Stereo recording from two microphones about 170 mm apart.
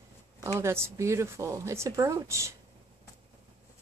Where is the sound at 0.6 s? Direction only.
15° right (ahead or behind).